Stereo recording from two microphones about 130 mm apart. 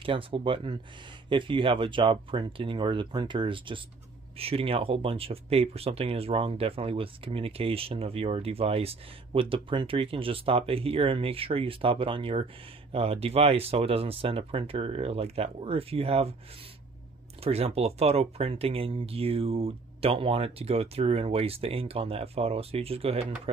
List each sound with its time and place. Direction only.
0.0 s speech: 40° right (ahead or behind)
17.4 s speech: 50° right (ahead or behind)